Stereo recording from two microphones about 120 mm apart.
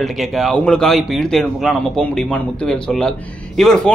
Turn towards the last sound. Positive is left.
turn(degrees=5)  # may be behind; listen again after turning